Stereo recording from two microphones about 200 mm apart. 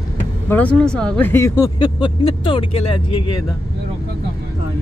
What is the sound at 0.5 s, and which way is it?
Speech, 10° left (ahead or behind).